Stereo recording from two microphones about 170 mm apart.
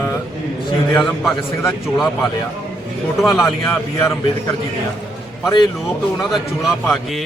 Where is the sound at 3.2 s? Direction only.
Centre (ahead or behind).